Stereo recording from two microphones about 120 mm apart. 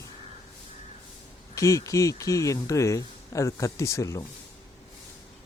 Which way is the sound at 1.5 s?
25° left (ahead or behind).